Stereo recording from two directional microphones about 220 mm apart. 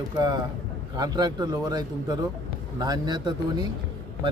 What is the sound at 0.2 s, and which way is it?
Speech, 20° right (ahead or behind).